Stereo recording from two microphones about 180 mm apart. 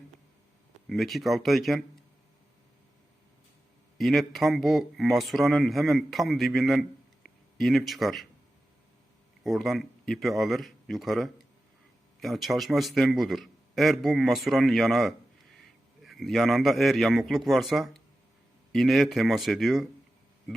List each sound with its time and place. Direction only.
0.9 s a man's voice: centre (ahead or behind)
3.9 s a man's voice: centre (ahead or behind)
9.4 s a man's voice: centre (ahead or behind)